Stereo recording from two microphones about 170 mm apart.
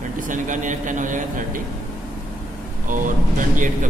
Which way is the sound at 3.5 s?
50° right (ahead or behind).